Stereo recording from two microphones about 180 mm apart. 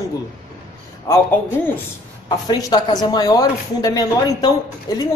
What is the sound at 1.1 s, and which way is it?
Speech, 15° left (ahead or behind).